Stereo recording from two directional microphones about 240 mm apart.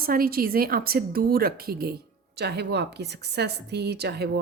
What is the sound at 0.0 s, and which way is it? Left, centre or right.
A woman's voice, right.